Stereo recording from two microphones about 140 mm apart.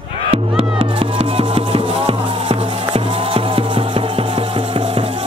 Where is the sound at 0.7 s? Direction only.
40° right (ahead or behind).